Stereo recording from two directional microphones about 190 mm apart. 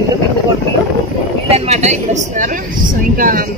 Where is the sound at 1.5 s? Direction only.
35° right (ahead or behind).